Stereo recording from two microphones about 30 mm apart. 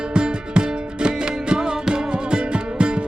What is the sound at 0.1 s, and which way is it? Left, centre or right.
Music, right.